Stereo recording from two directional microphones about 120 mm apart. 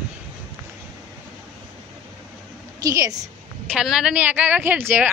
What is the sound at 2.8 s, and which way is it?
Speech, 30° right (ahead or behind).